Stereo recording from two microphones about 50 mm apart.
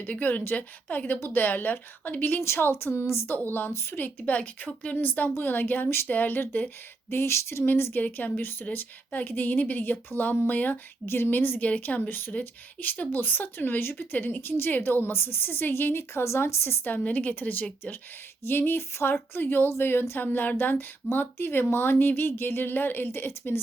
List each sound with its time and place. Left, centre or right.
0.1 s a woman's voice: left
2.4 s speech: left
2.9 s a sound: left
3.3 s a woman's voice: left
3.7 s a sound: left
3.9 s a woman's voice: left
7.1 s a sound: left
7.7 s a woman's voice: left
11.0 s a sound: left
11.3 s a woman's voice: left
16.9 s a woman's voice: left
18.4 s speech: left